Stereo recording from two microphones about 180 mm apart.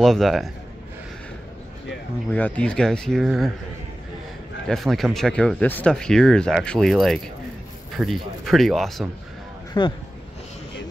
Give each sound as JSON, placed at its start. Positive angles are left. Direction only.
{"t": 0.0, "sound": "speech", "side_deg": 0}
{"t": 2.3, "sound": "speech", "side_deg": 10}
{"t": 4.6, "sound": "speech", "side_deg": 0}
{"t": 9.8, "sound": "speech", "side_deg": 25}